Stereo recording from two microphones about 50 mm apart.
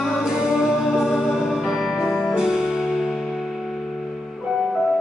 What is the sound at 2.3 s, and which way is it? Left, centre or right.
Music, centre.